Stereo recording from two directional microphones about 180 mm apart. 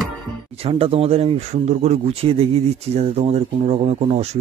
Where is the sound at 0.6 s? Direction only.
30° right (ahead or behind).